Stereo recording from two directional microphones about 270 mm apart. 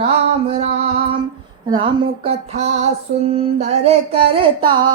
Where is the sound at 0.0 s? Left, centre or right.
Right.